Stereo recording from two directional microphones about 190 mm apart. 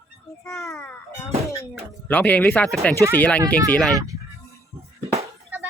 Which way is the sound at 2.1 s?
10° left (ahead or behind).